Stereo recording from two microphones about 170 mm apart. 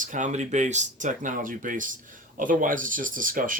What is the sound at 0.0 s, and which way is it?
Speech, 50° right (ahead or behind).